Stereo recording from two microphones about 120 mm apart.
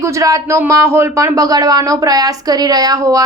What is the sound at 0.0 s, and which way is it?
Speech, 25° right (ahead or behind).